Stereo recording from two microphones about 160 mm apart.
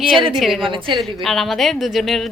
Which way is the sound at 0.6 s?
30° right (ahead or behind).